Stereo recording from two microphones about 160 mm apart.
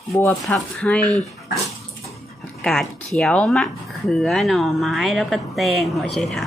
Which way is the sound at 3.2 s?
5° left (ahead or behind).